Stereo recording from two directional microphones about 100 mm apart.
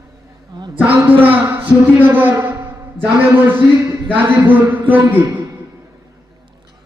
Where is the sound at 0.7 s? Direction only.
15° right (ahead or behind).